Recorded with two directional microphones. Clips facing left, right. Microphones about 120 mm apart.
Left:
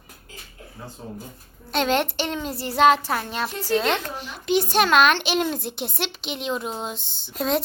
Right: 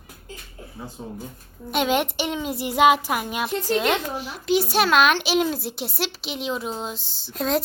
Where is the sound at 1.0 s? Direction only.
10° right (ahead or behind).